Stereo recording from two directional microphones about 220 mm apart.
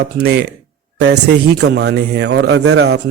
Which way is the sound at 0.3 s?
50° right (ahead or behind).